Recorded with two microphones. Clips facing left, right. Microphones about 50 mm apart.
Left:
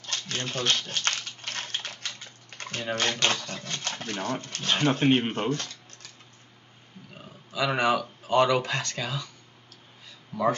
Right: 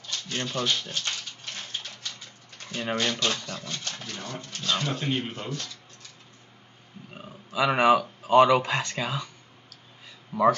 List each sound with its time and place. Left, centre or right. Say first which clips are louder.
0.0 s shuffling cards: left 1 dB; left
0.7 s a sound: left 2 dB; left
2.0 s bathtub: left 2 dB; left
3.0 s speech: left 3 dB; left
7.2 s speech: right 3 dB; centre
10.3 s speech: right 4 dB; centre